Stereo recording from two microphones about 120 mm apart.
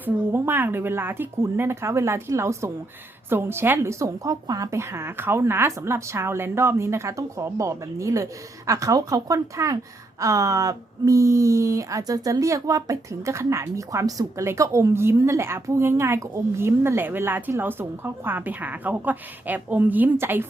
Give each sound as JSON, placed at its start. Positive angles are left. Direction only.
{"t": 0.0, "sound": "speech", "side_deg": -20}